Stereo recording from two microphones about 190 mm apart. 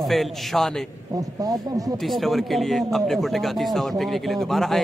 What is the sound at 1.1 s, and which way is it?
Speech, 20° right (ahead or behind).